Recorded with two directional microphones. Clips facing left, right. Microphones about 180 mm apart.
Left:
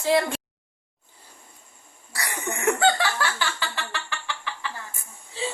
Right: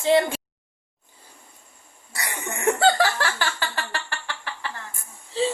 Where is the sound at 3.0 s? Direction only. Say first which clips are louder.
Right 3 dB; 45° right (ahead or behind).